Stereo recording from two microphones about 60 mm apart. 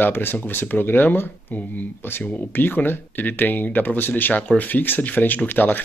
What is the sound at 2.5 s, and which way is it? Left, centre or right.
Speech, left.